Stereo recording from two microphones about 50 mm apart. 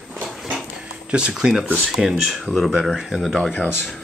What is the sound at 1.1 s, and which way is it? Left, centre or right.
Speech, centre.